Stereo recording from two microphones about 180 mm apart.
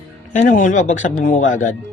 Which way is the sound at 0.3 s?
45° left (ahead or behind).